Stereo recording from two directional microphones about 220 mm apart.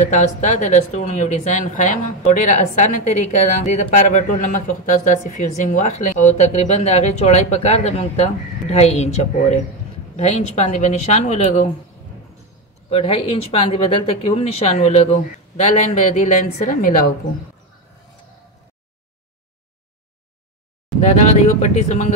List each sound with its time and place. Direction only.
0.2 s speech: 30° left (ahead or behind)
12.9 s speech: 25° left (ahead or behind)
21.1 s speech: 30° left (ahead or behind)